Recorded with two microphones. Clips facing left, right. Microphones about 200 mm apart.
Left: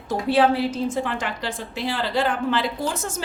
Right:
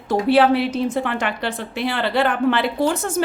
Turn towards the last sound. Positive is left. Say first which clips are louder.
# right 7 dB
turn(degrees=-60)  # may be behind; listen again after turning